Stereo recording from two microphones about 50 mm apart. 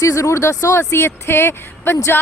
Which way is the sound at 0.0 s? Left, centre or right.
Left.